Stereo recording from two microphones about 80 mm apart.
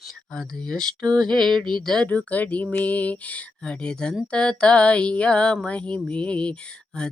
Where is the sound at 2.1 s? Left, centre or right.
Centre.